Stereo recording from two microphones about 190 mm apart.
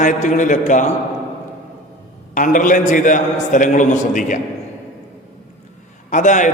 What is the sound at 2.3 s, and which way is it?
A man's voice, 45° left (ahead or behind).